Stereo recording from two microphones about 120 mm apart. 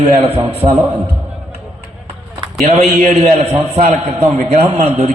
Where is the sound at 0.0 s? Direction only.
60° right (ahead or behind).